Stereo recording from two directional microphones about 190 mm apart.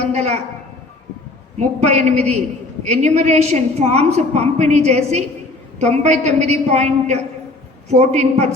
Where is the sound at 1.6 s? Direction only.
35° right (ahead or behind).